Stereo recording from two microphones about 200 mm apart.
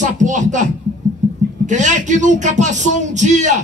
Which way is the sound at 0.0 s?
40° right (ahead or behind).